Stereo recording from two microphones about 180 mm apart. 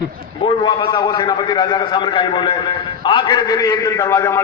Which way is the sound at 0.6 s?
25° left (ahead or behind).